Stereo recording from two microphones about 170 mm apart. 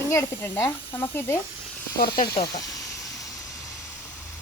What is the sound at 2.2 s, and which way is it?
Snake, 20° left (ahead or behind).